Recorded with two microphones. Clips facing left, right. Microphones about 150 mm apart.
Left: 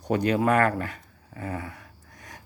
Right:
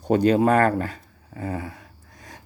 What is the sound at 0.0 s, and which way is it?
Speech, 30° right (ahead or behind).